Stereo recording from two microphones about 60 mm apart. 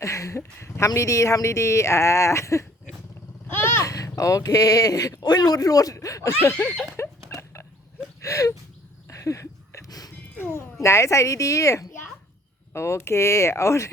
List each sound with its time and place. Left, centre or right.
0.0 s a sound: left
0.9 s speech: left
3.5 s vehicle: left
3.8 s speech: left
6.5 s a sound: left
7.0 s rodents: left
7.3 s a sound: left
8.2 s speech: left
9.0 s a sound: left
10.3 s cat: left
10.8 s speech: left
12.7 s speech: left